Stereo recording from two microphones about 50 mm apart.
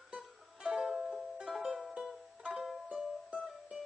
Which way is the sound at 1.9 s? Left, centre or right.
Centre.